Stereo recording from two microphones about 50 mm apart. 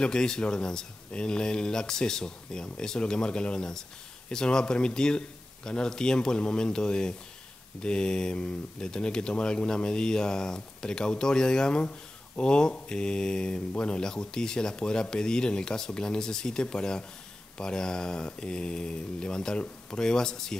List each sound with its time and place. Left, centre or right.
0.0 s speech: centre